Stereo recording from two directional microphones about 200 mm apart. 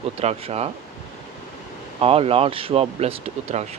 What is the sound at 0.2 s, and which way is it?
Speech, 30° right (ahead or behind).